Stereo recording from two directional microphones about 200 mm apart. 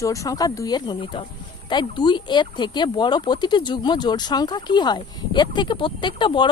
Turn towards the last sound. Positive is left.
turn(degrees=25)  # may be behind; listen again after turning